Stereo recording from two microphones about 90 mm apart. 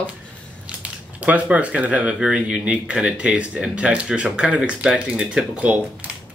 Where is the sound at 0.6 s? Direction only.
15° right (ahead or behind).